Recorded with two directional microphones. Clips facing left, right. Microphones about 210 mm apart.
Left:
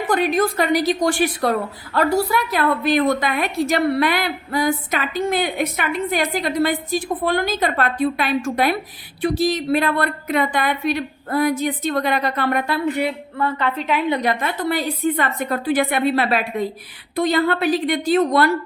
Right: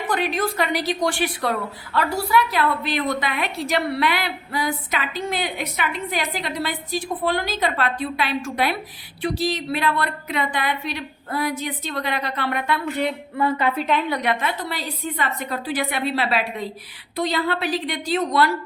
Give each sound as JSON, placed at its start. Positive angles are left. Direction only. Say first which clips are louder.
{"t": 0.1, "sound": "a woman's voice", "louder": "left 5 dB", "side_deg": 45}
{"t": 12.9, "sound": "speech", "louder": "left 1 dB", "side_deg": 10}
{"t": 13.3, "sound": "a woman's voice", "louder": "right 1 dB", "side_deg": -10}
{"t": 14.1, "sound": "a woman's voice", "louder": "left 3 dB", "side_deg": 35}
{"t": 14.4, "sound": "a woman's voice", "louder": "left 5 dB", "side_deg": 55}